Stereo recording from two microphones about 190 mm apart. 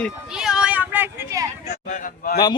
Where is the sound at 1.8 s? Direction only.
40° left (ahead or behind).